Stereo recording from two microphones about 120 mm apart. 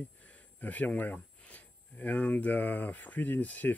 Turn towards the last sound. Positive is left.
turn(degrees=15)  # may be behind; listen again after turning